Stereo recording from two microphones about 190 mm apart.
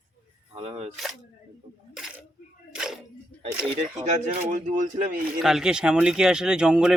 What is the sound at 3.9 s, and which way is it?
Speech, 35° right (ahead or behind).